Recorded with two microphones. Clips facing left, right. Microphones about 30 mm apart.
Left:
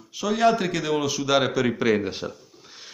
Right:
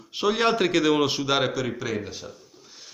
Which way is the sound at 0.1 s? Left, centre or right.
Right.